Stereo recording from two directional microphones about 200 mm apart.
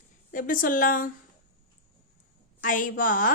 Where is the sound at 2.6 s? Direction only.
40° left (ahead or behind).